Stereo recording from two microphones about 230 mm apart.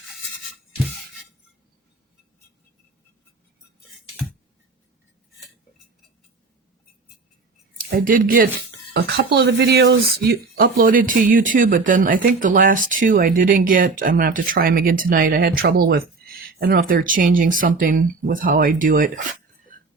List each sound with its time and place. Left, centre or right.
7.8 s speech: right